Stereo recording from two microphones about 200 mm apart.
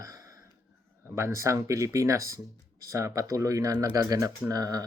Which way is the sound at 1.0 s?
15° right (ahead or behind).